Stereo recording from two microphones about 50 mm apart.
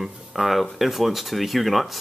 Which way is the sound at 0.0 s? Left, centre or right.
Centre.